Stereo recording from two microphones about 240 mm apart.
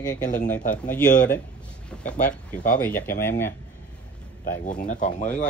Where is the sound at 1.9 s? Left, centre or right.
Centre.